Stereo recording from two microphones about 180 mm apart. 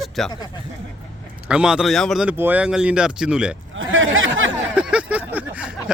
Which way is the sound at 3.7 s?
90° right.